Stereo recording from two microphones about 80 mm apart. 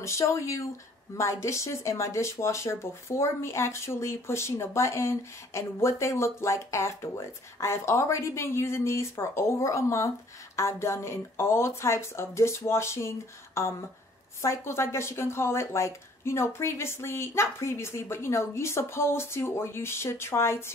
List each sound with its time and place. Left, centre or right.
0.0 s speech: left